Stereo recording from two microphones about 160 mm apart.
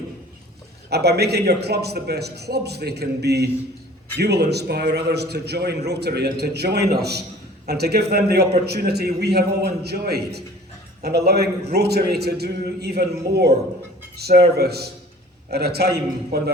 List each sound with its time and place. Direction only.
0.9 s a man's voice: 90° right
14.2 s a man's voice: 80° right